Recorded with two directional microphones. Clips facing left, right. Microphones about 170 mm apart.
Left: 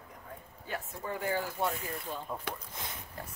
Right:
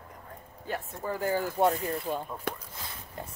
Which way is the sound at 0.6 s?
40° right (ahead or behind).